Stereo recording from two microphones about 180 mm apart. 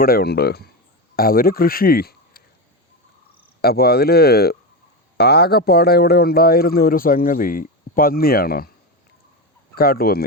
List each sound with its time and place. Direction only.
0.0 s a man's voice: 60° left (ahead or behind)
3.6 s speech: 60° left (ahead or behind)
9.7 s speech: 55° left (ahead or behind)